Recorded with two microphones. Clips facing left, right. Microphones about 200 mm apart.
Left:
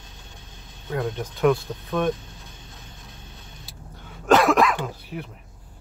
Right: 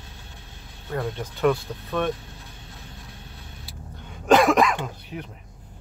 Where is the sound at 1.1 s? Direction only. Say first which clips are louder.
Left 1 dB; 15° left (ahead or behind).